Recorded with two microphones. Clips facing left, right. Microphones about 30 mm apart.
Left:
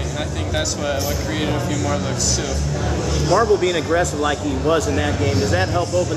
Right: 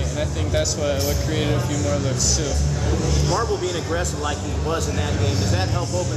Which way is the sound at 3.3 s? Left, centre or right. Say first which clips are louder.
Left 7 dB; left.